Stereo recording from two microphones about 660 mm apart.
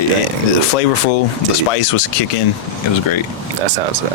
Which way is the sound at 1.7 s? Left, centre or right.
Left.